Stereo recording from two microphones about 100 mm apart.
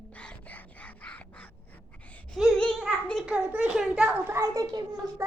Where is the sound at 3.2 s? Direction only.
10° right (ahead or behind).